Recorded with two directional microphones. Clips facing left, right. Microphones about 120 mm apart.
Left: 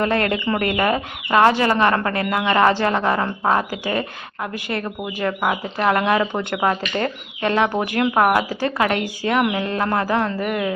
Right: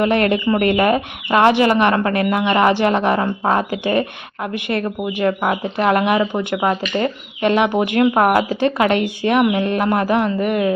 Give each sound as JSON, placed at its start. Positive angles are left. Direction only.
{"t": 0.0, "sound": "speech", "side_deg": -20}
{"t": 0.3, "sound": "speech", "side_deg": -10}
{"t": 0.8, "sound": "speech", "side_deg": -20}